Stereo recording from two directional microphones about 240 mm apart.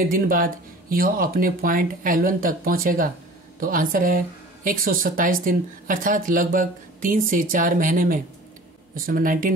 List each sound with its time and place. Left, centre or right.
0.0 s speech: right